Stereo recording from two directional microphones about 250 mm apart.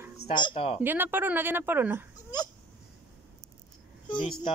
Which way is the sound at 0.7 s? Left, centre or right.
Centre.